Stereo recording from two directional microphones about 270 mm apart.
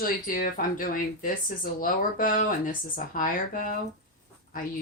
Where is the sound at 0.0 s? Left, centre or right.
Left.